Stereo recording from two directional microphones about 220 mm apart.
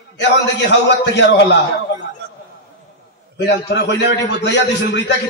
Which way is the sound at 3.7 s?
50° left (ahead or behind).